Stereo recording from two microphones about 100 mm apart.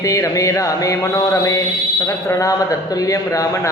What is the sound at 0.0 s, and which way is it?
Speech, 35° left (ahead or behind).